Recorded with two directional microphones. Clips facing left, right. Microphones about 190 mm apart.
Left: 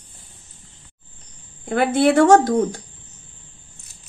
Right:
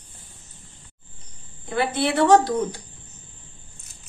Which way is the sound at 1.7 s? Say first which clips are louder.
Left 7 dB; 50° left (ahead or behind).